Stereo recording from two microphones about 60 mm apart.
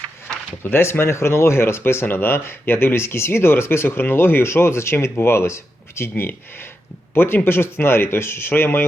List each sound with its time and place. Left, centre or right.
0.6 s speech: left